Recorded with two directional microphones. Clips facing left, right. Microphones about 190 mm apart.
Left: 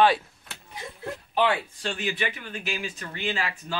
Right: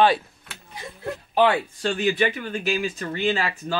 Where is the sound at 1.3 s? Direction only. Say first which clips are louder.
Right 5 dB; 45° right (ahead or behind).